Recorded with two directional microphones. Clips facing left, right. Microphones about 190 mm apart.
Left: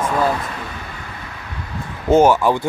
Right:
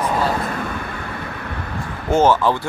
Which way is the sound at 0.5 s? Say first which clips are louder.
Right 5 dB; 55° right (ahead or behind).